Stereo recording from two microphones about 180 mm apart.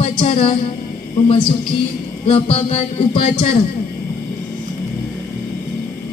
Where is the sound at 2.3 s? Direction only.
30° left (ahead or behind).